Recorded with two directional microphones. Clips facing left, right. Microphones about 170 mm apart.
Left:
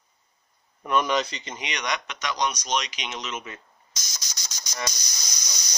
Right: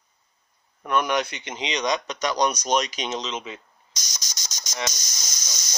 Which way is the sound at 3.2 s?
20° right (ahead or behind).